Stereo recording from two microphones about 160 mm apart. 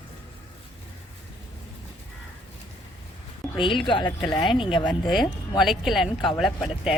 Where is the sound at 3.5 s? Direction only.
30° left (ahead or behind).